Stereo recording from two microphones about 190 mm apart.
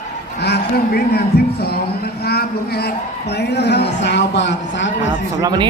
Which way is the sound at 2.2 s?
55° left (ahead or behind).